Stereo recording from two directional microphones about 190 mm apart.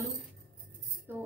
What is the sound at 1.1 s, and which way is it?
Speech, 10° right (ahead or behind).